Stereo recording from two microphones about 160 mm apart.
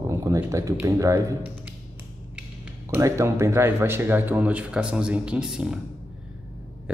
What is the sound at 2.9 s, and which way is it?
Speech, 20° right (ahead or behind).